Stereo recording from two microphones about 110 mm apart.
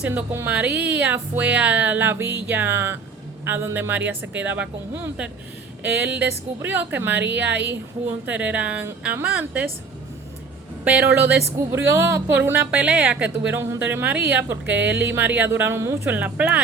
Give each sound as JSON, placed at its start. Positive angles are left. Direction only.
{"t": 0.0, "sound": "speech", "side_deg": -15}
{"t": 5.8, "sound": "speech", "side_deg": -15}
{"t": 10.8, "sound": "speech", "side_deg": -15}
{"t": 16.0, "sound": "speech", "side_deg": -15}